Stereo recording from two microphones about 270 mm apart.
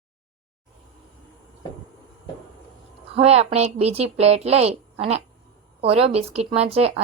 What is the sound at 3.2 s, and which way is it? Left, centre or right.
A woman's voice, right.